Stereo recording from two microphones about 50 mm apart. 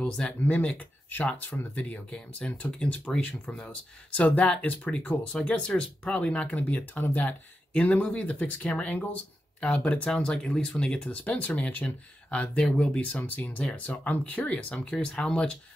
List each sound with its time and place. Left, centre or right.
0.5 s speech: left
1.4 s speech: left
1.8 s speech: left
7.0 s speech: left; by 11.0 s centre
11.1 s speech: left
13.1 s speech: left
15.0 s speech: centre